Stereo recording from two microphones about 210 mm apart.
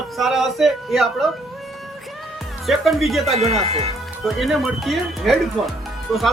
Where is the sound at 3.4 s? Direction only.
30° right (ahead or behind).